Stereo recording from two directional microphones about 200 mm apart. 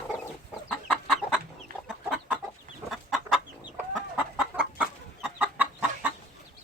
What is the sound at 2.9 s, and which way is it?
Chicken, centre (ahead or behind).